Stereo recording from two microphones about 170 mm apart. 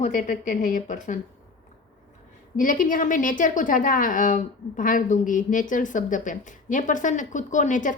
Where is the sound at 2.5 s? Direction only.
50° left (ahead or behind).